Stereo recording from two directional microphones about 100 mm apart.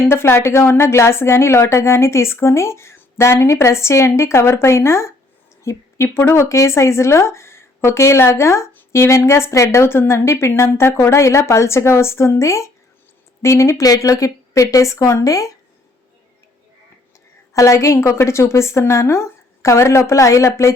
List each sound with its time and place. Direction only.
0.1 s speech: 25° left (ahead or behind)
17.5 s speech: 30° left (ahead or behind)